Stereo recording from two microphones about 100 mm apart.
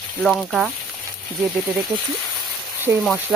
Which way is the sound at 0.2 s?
Centre (ahead or behind).